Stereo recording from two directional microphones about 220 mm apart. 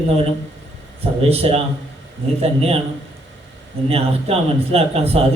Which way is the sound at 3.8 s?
25° right (ahead or behind).